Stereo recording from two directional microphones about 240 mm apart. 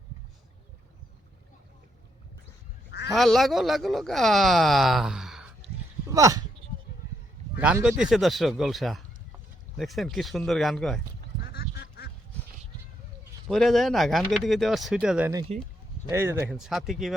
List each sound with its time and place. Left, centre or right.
3.2 s speech: centre
6.1 s speech: centre
7.6 s speech: centre
11.4 s duck: left
13.5 s speech: centre
15.5 s speech: right
16.0 s speech: centre